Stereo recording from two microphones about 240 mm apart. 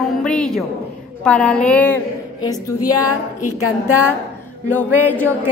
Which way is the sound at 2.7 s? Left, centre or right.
Left.